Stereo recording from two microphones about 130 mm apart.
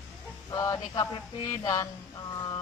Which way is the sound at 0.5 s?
25° left (ahead or behind).